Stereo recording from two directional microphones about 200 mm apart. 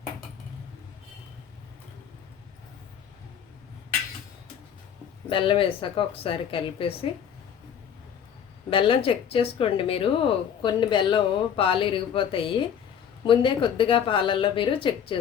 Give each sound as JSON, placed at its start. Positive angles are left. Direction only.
{"t": 5.3, "sound": "speech", "side_deg": 25}
{"t": 8.7, "sound": "speech", "side_deg": 25}